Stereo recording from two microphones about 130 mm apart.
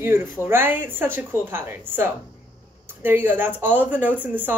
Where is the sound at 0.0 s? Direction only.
15° right (ahead or behind).